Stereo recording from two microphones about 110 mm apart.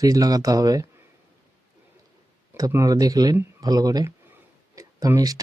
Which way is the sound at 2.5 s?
30° right (ahead or behind).